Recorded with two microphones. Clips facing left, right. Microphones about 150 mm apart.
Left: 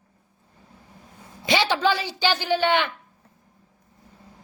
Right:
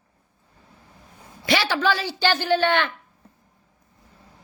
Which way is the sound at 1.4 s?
20° left (ahead or behind).